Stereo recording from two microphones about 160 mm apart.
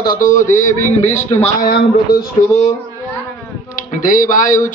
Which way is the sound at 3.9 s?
55° left (ahead or behind).